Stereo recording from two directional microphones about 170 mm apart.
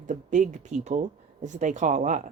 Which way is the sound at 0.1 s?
45° right (ahead or behind).